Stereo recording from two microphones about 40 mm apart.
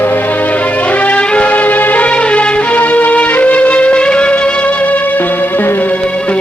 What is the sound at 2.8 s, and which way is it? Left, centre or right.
Music, left.